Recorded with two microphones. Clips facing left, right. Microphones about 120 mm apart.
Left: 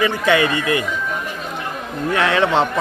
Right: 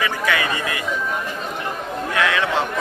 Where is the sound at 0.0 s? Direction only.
30° left (ahead or behind).